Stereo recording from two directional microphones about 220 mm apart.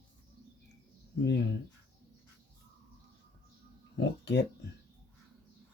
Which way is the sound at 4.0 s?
50° left (ahead or behind).